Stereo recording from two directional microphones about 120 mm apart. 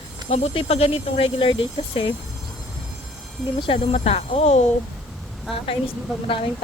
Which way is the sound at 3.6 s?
50° left (ahead or behind).